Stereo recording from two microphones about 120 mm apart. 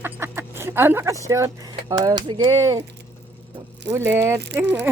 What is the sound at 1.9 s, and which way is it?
Speech, 30° right (ahead or behind).